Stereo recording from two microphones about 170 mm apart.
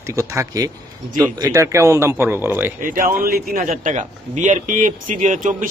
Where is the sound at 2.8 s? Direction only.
55° right (ahead or behind).